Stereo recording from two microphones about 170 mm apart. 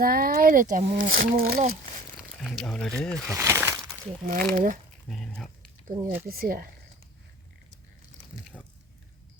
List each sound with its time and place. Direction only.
0.0 s speech: 60° right (ahead or behind)
2.4 s speech: centre (ahead or behind)
3.2 s speech: 15° right (ahead or behind)
4.3 s speech: 55° right (ahead or behind)
5.0 s speech: 5° left (ahead or behind)
6.0 s speech: 10° right (ahead or behind)
6.2 s speech: 60° right (ahead or behind)
8.5 s a sound: 10° left (ahead or behind)